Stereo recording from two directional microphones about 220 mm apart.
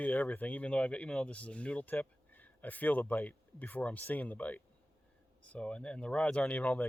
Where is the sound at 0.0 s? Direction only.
5° left (ahead or behind).